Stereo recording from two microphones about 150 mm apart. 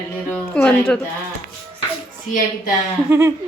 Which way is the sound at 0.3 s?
5° left (ahead or behind).